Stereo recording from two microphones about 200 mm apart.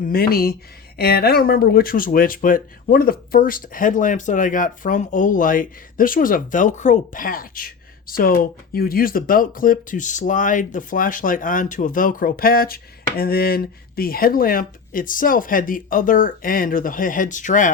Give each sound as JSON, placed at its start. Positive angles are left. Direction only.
{"t": 0.0, "sound": "speech", "side_deg": 50}